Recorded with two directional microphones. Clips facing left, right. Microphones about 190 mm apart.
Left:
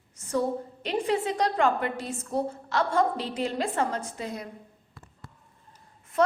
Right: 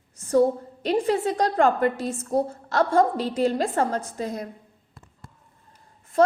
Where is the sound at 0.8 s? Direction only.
40° right (ahead or behind).